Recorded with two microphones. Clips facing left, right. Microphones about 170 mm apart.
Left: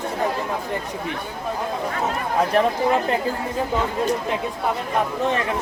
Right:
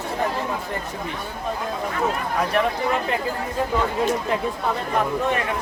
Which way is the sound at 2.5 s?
35° left (ahead or behind).